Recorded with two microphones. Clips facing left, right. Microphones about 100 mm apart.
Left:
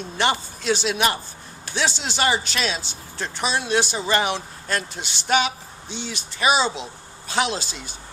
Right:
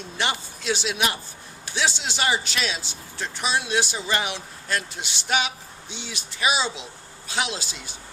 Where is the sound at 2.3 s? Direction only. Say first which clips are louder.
Left 2 dB; centre (ahead or behind).